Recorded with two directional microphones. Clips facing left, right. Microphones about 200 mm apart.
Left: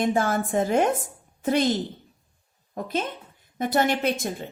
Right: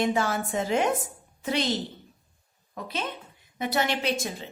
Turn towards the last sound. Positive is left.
turn(degrees=55)  # may be behind; listen again after turning